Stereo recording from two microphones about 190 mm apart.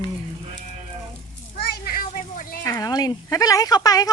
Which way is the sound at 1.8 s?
50° left (ahead or behind).